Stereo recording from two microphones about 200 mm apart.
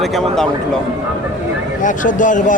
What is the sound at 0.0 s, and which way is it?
Speech, centre (ahead or behind).